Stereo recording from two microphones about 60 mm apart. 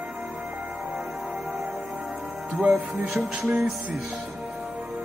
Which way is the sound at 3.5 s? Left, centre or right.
Centre.